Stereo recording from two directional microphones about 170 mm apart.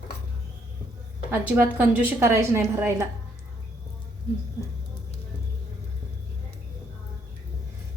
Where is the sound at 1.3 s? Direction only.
10° right (ahead or behind).